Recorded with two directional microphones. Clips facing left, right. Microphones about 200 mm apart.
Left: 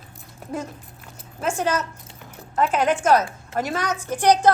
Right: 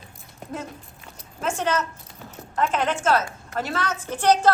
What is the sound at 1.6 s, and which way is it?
A woman's voice, 10° left (ahead or behind).